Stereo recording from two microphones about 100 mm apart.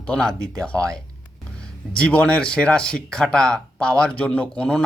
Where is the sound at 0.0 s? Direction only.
10° left (ahead or behind).